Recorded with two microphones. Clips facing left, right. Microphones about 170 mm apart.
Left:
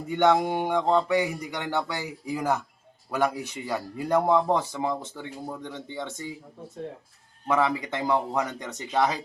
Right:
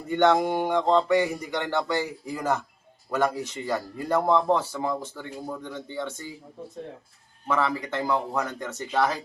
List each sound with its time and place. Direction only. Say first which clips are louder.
0.1 s speech: right 1 dB; 10° left (ahead or behind)
7.4 s speech: left 2 dB; 15° left (ahead or behind)